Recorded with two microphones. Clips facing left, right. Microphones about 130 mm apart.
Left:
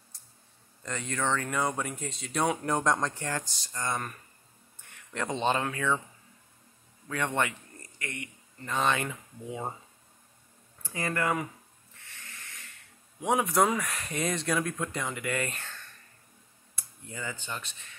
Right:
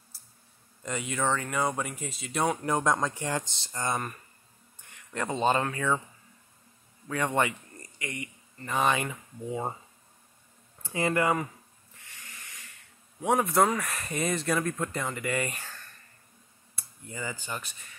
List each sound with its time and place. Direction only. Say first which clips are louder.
0.1 s a sound: right 1 dB; 5° right (ahead or behind)
0.8 s speech: right 2 dB; 10° right (ahead or behind)
4.9 s speech: right 1 dB; 10° right (ahead or behind)
7.1 s speech: right 3 dB; 10° right (ahead or behind)
10.8 s speech: right 4 dB; 20° right (ahead or behind)
12.2 s a sound: even; 10° right (ahead or behind)
13.2 s speech: right 1 dB; centre (ahead or behind)